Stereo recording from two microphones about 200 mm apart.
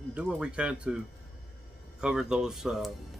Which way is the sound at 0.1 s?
5° right (ahead or behind).